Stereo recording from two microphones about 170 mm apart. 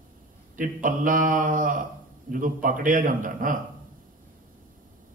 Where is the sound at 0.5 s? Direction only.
50° right (ahead or behind).